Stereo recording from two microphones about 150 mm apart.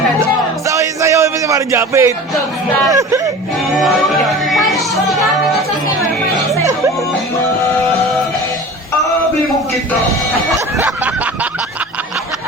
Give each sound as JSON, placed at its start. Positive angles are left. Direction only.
{"t": 0.7, "sound": "music", "side_deg": -20}
{"t": 2.9, "sound": "speech", "side_deg": -25}
{"t": 3.8, "sound": "speech", "side_deg": 0}
{"t": 10.8, "sound": "snicker", "side_deg": -10}